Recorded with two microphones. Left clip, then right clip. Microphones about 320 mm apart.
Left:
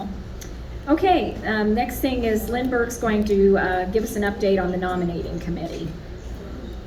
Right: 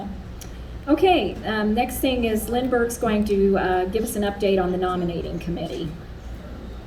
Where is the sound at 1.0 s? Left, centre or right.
Centre.